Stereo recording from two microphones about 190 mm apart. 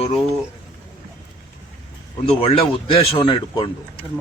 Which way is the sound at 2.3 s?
30° left (ahead or behind).